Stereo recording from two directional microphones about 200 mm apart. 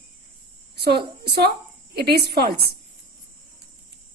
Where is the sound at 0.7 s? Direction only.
55° right (ahead or behind).